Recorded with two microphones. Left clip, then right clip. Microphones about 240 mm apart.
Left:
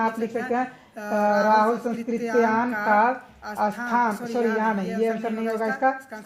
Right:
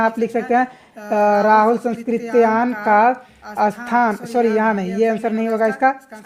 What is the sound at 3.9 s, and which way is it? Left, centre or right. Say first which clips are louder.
Speech: right 6 dB; right.